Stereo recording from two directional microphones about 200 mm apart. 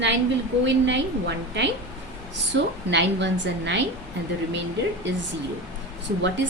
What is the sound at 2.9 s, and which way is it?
Speech, 60° right (ahead or behind).